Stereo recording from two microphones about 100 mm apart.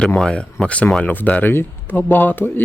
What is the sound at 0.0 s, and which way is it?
Speech, 10° left (ahead or behind).